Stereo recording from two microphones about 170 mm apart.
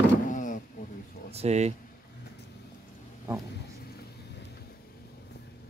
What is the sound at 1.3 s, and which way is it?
Speech, 40° right (ahead or behind).